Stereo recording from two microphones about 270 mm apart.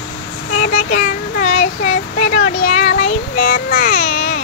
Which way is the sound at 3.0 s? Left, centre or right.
Left.